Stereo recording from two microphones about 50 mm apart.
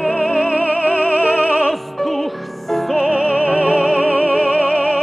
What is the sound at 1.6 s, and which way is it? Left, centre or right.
Music, centre.